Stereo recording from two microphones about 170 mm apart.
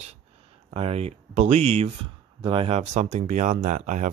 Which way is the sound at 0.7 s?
35° right (ahead or behind).